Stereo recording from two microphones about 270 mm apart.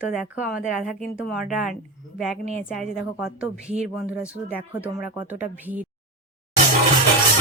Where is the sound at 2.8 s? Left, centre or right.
Centre.